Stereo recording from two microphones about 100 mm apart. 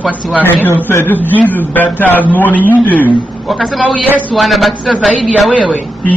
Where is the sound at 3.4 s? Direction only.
Centre (ahead or behind).